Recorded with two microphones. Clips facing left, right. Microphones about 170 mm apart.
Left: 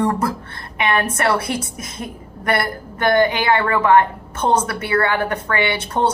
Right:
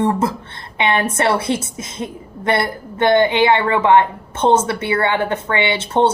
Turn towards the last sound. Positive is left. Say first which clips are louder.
# right 3 dB
turn(degrees=-25)  # may be behind; listen again after turning